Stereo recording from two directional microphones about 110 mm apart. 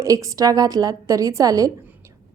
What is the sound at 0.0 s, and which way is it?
A woman's voice, 30° right (ahead or behind).